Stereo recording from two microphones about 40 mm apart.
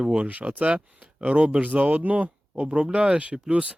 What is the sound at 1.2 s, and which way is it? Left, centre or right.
Speech, right.